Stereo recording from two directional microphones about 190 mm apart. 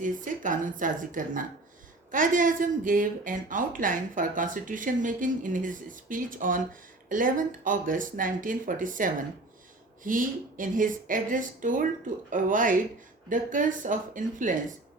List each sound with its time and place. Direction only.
0.0 s speech: 45° right (ahead or behind)